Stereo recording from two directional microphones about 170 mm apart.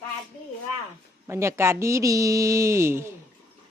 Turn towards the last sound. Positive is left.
turn(degrees=-15)  # may be behind; listen again after turning